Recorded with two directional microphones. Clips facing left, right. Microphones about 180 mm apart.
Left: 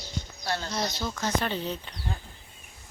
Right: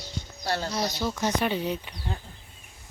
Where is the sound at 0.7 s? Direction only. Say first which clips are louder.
Right 3 dB; 10° right (ahead or behind).